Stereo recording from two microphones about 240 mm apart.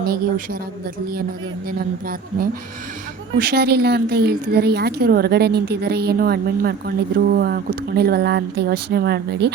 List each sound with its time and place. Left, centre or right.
0.0 s a woman's voice: right
3.3 s a woman's voice: right